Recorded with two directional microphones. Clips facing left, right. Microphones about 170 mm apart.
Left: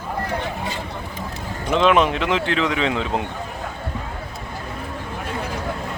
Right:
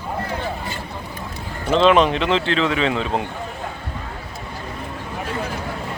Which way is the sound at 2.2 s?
15° left (ahead or behind).